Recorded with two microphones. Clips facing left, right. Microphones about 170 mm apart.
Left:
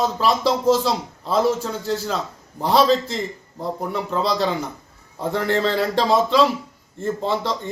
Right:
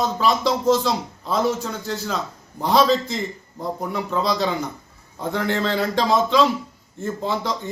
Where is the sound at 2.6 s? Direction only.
Centre (ahead or behind).